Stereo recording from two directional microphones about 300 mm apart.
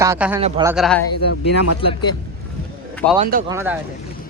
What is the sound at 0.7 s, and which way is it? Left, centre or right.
Speech, centre.